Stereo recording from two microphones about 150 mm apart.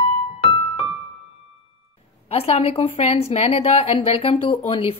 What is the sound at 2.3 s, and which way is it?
A woman's voice, 40° left (ahead or behind).